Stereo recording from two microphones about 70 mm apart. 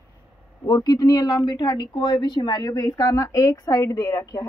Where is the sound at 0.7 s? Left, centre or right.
Left.